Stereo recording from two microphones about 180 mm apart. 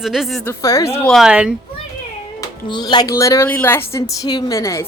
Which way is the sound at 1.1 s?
5° right (ahead or behind).